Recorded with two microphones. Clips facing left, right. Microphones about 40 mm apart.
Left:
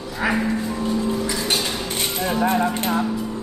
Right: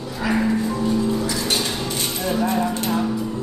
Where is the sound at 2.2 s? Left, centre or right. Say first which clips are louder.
Left 1 dB; left.